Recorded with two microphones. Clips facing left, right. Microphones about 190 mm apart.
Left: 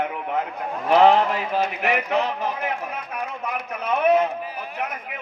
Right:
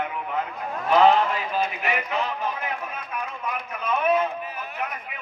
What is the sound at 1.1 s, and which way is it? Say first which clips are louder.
Speech: left 2 dB; 70° left (ahead or behind).